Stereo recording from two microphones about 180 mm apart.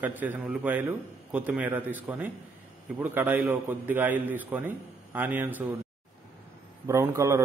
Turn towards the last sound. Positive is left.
turn(degrees=-15)  # may be behind; listen again after turning